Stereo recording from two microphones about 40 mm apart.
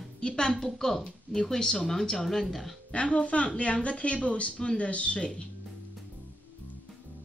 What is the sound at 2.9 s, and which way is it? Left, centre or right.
Speech, left.